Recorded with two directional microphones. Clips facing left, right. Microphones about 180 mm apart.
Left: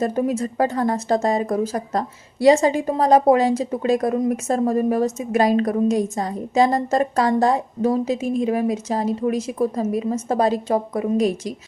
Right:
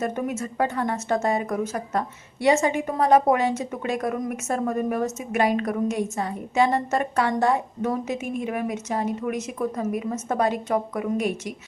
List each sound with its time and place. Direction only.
0.0 s speech: 35° left (ahead or behind)